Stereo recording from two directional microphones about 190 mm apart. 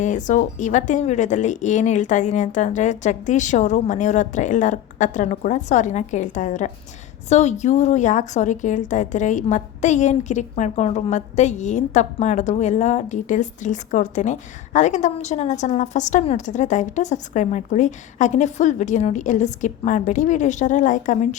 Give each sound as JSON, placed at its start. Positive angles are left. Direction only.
{"t": 0.0, "sound": "a woman's voice", "side_deg": 40}